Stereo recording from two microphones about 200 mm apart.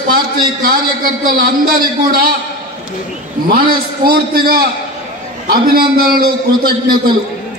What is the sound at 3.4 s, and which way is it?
A man's voice, 50° right (ahead or behind).